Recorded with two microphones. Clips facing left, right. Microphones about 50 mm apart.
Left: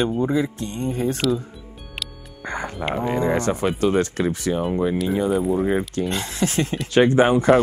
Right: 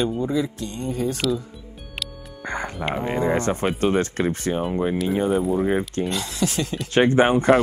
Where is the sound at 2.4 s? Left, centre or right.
Right.